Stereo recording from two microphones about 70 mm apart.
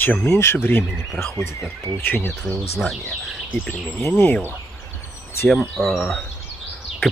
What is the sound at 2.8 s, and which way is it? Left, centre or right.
Speech, centre.